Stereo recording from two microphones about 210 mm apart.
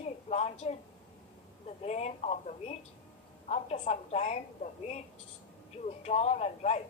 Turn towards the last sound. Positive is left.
turn(degrees=30)  # may be behind; listen again after turning